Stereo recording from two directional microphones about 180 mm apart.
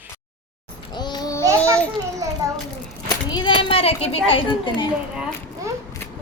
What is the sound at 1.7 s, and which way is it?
Children playing, 5° left (ahead or behind).